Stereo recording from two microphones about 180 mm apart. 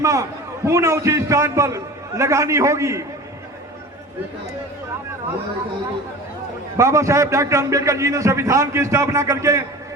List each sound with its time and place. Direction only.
0.0 s a man's voice: 15° right (ahead or behind)
6.7 s a man's voice: 15° right (ahead or behind)